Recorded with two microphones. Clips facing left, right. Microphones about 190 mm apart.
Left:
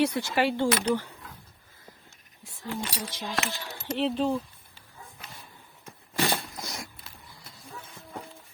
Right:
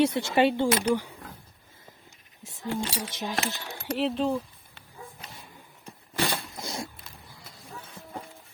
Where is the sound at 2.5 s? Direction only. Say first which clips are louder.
Right 3 dB; 25° right (ahead or behind).